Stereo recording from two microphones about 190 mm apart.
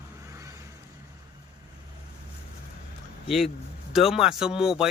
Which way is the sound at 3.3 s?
Centre (ahead or behind).